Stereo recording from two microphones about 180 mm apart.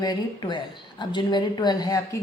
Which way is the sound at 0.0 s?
25° left (ahead or behind).